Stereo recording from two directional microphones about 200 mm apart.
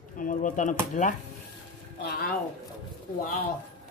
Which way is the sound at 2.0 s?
45° left (ahead or behind).